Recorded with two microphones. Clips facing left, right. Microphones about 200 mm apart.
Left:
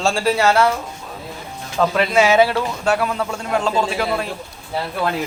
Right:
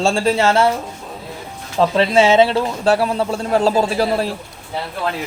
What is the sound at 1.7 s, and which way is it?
Speech, 30° right (ahead or behind).